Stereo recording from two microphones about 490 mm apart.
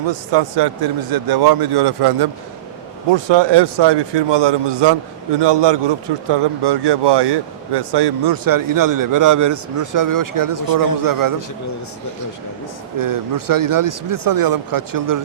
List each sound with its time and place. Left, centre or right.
0.1 s a man's voice: right
13.0 s speech: right